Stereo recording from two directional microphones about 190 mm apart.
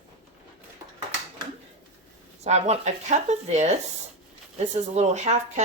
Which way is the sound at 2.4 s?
35° right (ahead or behind).